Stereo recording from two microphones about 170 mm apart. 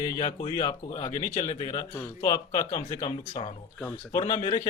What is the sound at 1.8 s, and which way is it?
A man's voice, 15° left (ahead or behind).